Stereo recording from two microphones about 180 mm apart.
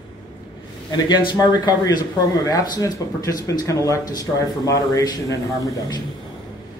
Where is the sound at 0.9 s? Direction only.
25° left (ahead or behind).